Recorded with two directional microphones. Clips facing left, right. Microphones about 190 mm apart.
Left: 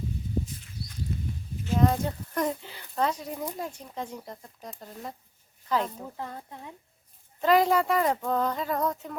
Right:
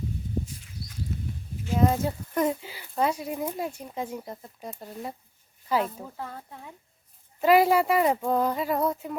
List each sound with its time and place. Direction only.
1.1 s a sound: 5° right (ahead or behind)
1.6 s speech: 10° right (ahead or behind)
6.1 s speech: 15° left (ahead or behind)
7.4 s speech: 10° right (ahead or behind)